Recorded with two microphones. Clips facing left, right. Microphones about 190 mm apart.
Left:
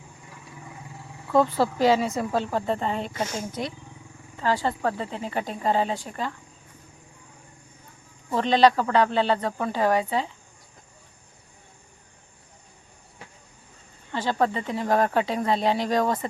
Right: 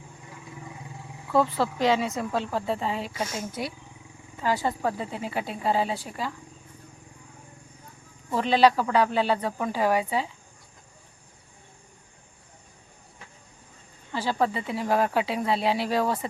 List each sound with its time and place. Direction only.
1.3 s speech: centre (ahead or behind)
8.3 s speech: 5° right (ahead or behind)
14.1 s speech: 5° right (ahead or behind)